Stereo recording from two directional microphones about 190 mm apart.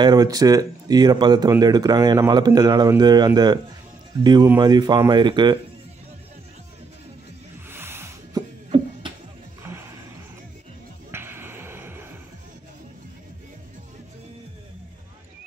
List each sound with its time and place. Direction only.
0.0 s speech: 20° right (ahead or behind)
7.7 s music: 10° right (ahead or behind)
9.6 s music: 10° right (ahead or behind)
11.1 s a sound: 10° right (ahead or behind)